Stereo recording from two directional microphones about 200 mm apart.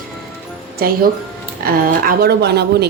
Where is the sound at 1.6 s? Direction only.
45° right (ahead or behind).